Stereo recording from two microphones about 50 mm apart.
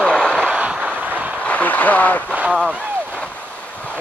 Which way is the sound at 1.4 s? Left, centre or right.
Left.